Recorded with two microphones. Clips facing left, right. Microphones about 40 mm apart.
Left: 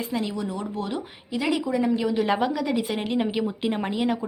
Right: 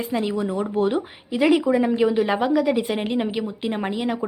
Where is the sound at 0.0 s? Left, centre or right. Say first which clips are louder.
Right 4 dB; centre.